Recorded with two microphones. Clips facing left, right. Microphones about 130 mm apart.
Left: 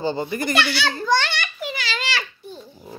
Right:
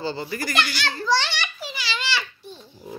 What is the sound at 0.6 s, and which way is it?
Speech, 70° left (ahead or behind).